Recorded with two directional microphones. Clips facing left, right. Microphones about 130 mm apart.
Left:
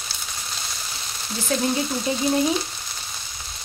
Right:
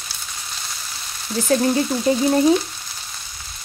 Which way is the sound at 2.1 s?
45° right (ahead or behind).